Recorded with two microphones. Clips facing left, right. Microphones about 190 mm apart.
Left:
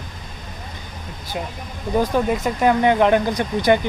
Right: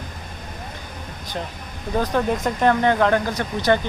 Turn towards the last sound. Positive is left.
turn(degrees=15)  # may be behind; listen again after turning